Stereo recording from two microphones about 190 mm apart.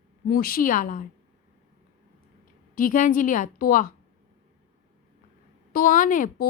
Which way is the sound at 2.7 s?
45° left (ahead or behind).